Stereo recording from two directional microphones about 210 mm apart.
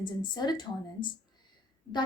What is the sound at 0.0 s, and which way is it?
A woman's voice, 20° left (ahead or behind).